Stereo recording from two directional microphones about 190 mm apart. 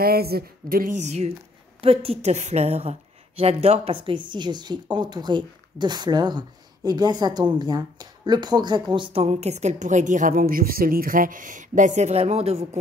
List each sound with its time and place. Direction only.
0.0 s a woman's voice: 55° right (ahead or behind); by 12.6 s 35° right (ahead or behind)